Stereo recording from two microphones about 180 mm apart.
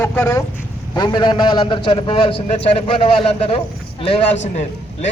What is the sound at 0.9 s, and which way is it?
A man's voice, 25° left (ahead or behind).